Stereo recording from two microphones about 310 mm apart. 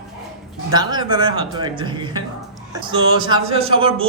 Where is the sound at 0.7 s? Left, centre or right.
Centre.